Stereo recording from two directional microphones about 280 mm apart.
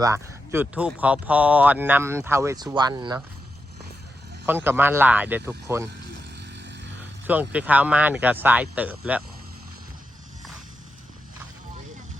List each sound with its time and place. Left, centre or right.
0.0 s speech: centre
4.4 s speech: centre
6.4 s a sound: right
7.3 s speech: centre